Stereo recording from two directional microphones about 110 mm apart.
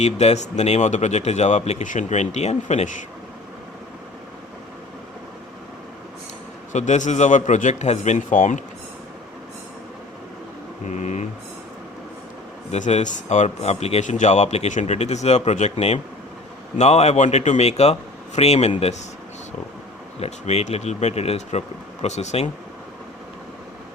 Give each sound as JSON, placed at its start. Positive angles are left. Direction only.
{"t": 0.0, "sound": "speech", "side_deg": 80}
{"t": 6.7, "sound": "speech", "side_deg": 90}
{"t": 10.8, "sound": "mantra", "side_deg": 90}
{"t": 12.7, "sound": "speech", "side_deg": 90}
{"t": 16.7, "sound": "a man's voice", "side_deg": 85}
{"t": 20.1, "sound": "speech", "side_deg": 70}
{"t": 22.0, "sound": "speech", "side_deg": 90}